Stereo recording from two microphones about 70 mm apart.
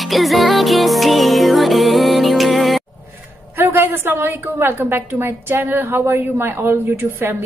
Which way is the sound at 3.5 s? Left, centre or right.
Right.